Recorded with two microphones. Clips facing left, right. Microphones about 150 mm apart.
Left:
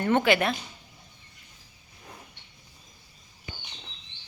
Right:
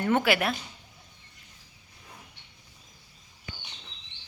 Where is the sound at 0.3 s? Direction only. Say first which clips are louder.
Left 2 dB; 5° right (ahead or behind).